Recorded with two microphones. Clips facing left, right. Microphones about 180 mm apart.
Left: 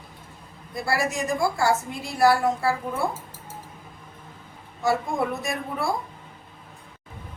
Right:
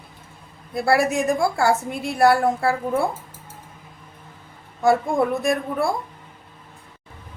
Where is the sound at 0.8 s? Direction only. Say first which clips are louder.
Right 7 dB; 60° right (ahead or behind).